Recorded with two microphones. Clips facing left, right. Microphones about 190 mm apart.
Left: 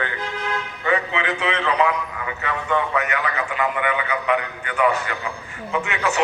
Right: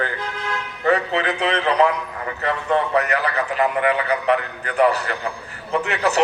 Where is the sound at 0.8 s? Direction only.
35° right (ahead or behind).